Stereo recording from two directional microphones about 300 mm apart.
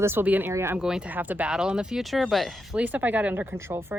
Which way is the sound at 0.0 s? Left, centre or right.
Centre.